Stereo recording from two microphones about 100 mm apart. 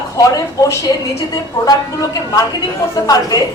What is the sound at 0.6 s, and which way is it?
A woman's voice, 30° left (ahead or behind).